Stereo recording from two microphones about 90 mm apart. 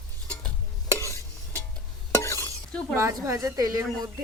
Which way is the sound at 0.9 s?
35° left (ahead or behind).